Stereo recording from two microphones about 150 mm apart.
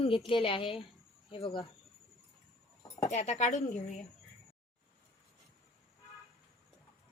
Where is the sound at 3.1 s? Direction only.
50° left (ahead or behind).